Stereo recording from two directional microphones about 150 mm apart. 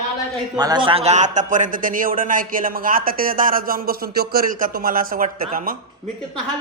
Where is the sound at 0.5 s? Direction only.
25° right (ahead or behind); by 5.7 s 65° right (ahead or behind).